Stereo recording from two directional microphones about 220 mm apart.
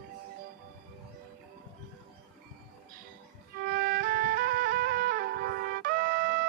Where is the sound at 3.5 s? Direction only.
45° right (ahead or behind).